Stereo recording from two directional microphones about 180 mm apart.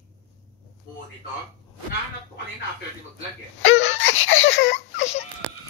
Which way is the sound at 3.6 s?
90° left.